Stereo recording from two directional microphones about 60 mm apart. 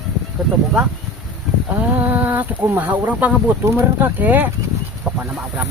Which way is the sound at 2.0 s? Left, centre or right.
Right.